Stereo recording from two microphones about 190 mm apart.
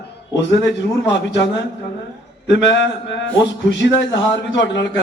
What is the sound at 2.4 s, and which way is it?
A man's voice, 65° left (ahead or behind).